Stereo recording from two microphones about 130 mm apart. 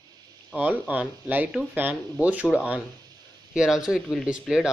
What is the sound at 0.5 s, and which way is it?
Speech, 10° right (ahead or behind).